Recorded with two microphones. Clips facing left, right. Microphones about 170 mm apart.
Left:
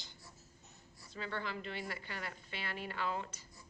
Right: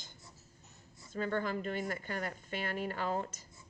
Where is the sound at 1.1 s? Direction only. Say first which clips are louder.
Right 7 dB; 45° right (ahead or behind).